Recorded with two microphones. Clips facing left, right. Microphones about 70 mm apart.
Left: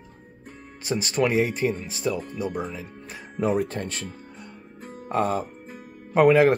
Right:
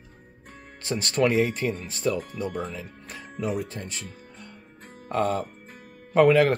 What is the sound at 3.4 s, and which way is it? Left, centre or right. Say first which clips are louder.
Speech: left 6 dB; left.